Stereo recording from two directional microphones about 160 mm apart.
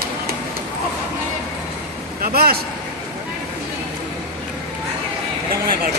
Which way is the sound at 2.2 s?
70° right (ahead or behind).